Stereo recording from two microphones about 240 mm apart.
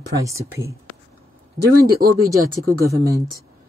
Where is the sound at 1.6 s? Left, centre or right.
Right.